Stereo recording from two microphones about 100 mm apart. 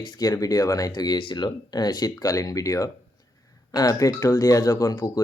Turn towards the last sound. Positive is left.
turn(degrees=35)  # may be behind; listen again after turning